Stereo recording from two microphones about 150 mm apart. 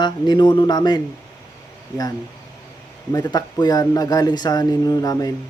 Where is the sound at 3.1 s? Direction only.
25° left (ahead or behind).